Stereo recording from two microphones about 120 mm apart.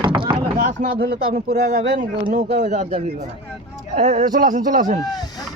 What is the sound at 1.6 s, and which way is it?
Speech, 80° right.